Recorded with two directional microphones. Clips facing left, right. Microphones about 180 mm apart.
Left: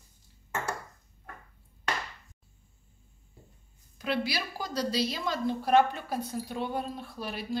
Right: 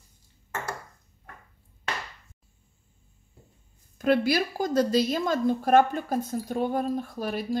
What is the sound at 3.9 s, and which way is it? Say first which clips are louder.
A woman's voice: right 9 dB; 50° right (ahead or behind).